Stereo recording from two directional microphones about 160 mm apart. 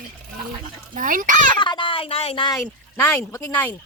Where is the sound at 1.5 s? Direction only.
30° left (ahead or behind).